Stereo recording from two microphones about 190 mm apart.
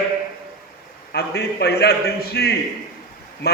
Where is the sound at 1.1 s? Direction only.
60° left (ahead or behind).